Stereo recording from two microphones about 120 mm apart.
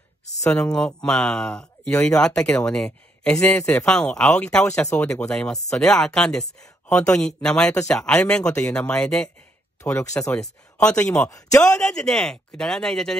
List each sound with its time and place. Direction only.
0.5 s speech: 5° left (ahead or behind)
9.8 s speech: 20° left (ahead or behind)
10.3 s speech: 5° left (ahead or behind)
11.2 s speech: 25° left (ahead or behind)
11.6 s speech: 5° left (ahead or behind)